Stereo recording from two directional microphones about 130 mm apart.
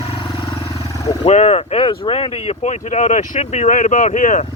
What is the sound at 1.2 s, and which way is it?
Speech, 60° left (ahead or behind).